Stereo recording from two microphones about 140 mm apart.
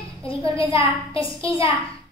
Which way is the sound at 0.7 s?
40° left (ahead or behind).